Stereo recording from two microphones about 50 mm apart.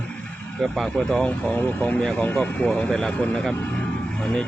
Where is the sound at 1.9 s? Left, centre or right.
Centre.